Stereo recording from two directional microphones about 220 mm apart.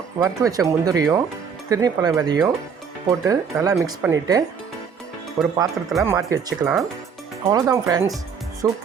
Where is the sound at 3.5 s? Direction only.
10° right (ahead or behind).